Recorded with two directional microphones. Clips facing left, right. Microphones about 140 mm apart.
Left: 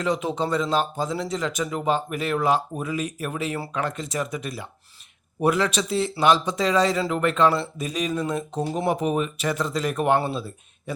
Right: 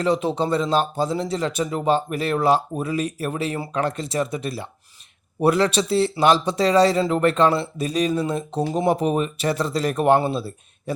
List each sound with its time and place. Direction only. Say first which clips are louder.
0.0 s speech: right 4 dB; 30° right (ahead or behind)